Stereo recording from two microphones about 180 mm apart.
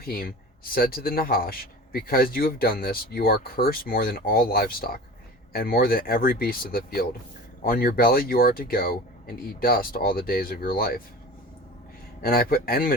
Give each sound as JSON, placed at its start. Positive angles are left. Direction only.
{"t": 0.0, "sound": "speech", "side_deg": 55}
{"t": 12.2, "sound": "speech", "side_deg": 55}